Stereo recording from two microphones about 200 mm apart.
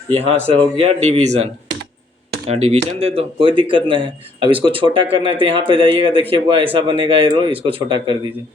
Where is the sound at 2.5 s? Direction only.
35° right (ahead or behind).